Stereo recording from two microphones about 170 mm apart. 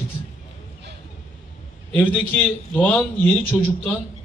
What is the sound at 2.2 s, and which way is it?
A man's voice, 10° left (ahead or behind).